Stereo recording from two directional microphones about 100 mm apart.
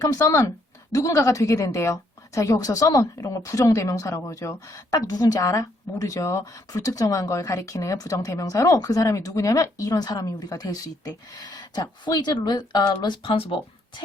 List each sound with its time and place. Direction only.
0.0 s a woman's voice: 35° left (ahead or behind)
13.3 s speech: 65° left (ahead or behind)